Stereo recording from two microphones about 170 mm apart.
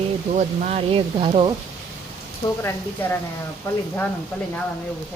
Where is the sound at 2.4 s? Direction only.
15° left (ahead or behind).